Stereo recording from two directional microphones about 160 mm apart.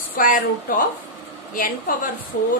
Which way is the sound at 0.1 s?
60° left (ahead or behind).